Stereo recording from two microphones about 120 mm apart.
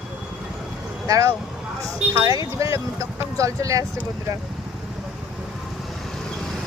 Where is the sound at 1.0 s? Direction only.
30° right (ahead or behind).